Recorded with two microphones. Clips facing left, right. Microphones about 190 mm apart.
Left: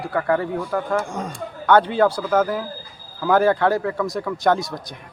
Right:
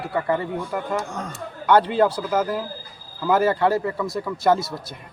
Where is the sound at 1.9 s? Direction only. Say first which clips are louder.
Left 1 dB; 5° right (ahead or behind).